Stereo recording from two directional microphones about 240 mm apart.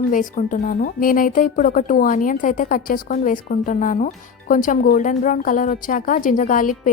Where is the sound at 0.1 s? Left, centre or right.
Left.